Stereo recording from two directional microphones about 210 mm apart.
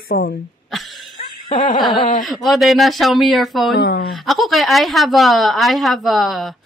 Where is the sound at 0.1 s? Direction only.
45° left (ahead or behind).